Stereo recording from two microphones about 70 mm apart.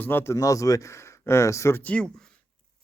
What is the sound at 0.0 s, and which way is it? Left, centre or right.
Speech, left.